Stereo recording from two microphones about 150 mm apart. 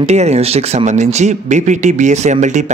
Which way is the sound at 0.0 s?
45° right (ahead or behind).